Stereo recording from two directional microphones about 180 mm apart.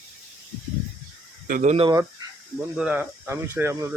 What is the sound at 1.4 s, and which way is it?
Speech, 45° right (ahead or behind).